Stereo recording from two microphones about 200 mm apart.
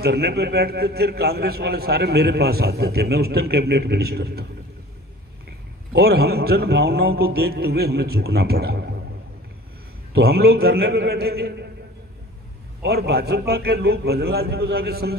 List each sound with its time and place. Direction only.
0.0 s a man's voice: 55° right (ahead or behind)
5.9 s a man's voice: 55° right (ahead or behind)
10.1 s a man's voice: 50° right (ahead or behind)
12.8 s a man's voice: 55° right (ahead or behind)